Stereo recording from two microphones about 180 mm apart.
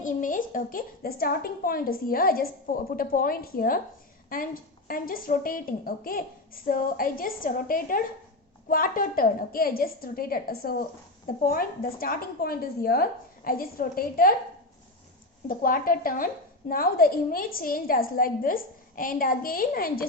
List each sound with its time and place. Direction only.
0.0 s a woman's voice: 45° left (ahead or behind)
15.4 s a woman's voice: 50° left (ahead or behind)